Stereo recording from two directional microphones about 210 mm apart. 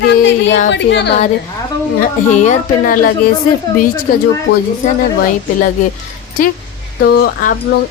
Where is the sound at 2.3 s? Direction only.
35° left (ahead or behind).